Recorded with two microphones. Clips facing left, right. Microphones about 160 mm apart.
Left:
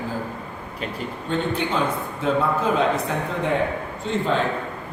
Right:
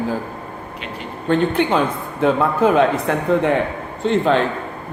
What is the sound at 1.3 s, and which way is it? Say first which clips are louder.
A man's voice: right 8 dB; 65° right (ahead or behind).